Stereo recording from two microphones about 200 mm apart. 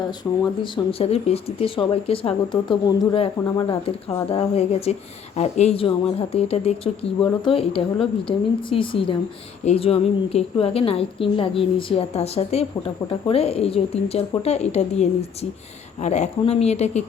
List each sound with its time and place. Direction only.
0.6 s a woman's voice: 30° left (ahead or behind)